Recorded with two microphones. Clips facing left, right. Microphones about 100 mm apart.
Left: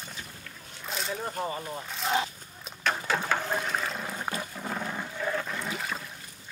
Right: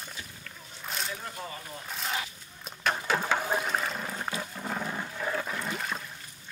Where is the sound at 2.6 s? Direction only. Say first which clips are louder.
Even; centre (ahead or behind).